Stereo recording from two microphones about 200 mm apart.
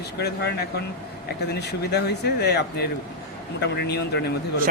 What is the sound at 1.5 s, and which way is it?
Speech, 55° left (ahead or behind).